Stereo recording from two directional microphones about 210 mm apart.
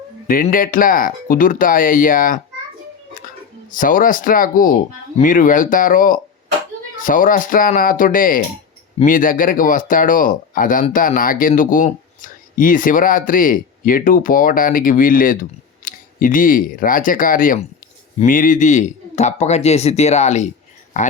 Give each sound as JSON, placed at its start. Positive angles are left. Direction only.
{"t": 0.3, "sound": "speech", "side_deg": 40}
{"t": 3.7, "sound": "speech", "side_deg": 40}